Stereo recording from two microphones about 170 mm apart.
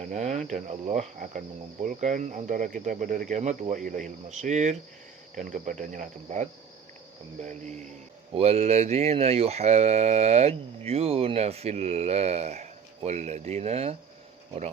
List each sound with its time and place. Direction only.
0.0 s cricket: 45° right (ahead or behind)
8.3 s speech: 35° right (ahead or behind)